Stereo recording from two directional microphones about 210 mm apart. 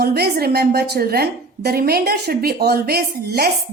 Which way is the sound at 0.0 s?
50° right (ahead or behind).